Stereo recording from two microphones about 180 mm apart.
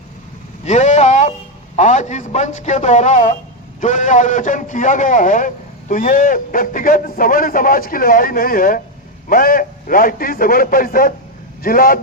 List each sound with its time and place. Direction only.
0.6 s vehicle: 40° left (ahead or behind)
1.7 s a man's voice: 40° left (ahead or behind)